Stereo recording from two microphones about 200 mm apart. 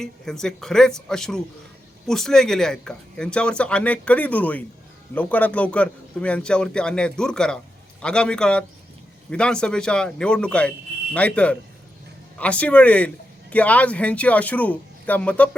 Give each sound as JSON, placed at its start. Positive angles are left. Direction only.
{"t": 0.0, "sound": "speech", "side_deg": 5}